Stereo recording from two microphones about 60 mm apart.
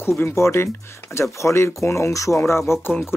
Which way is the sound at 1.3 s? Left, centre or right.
Left.